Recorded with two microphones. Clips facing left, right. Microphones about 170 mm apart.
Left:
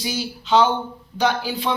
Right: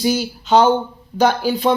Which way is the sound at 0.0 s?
45° right (ahead or behind).